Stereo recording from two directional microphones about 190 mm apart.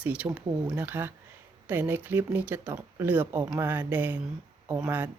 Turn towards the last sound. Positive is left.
turn(degrees=-10)  # may be behind; listen again after turning